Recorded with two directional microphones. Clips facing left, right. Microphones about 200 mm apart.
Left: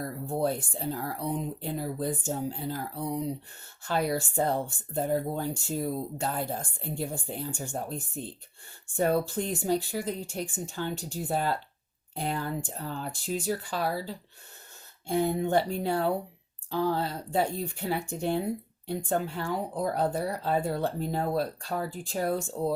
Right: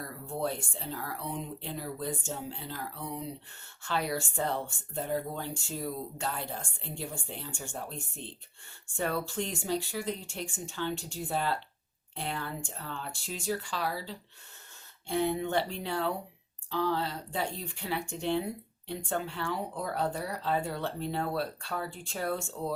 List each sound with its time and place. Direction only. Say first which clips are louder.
0.0 s speech: left 5 dB; 40° left (ahead or behind)